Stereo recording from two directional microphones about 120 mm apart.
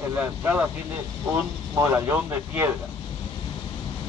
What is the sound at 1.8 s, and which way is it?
Speech, 20° right (ahead or behind).